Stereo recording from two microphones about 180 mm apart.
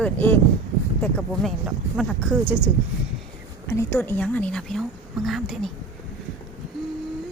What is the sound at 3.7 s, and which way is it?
A woman's voice, 15° left (ahead or behind).